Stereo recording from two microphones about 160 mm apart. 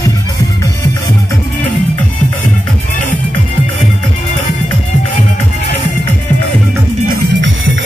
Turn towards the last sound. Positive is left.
turn(degrees=-90)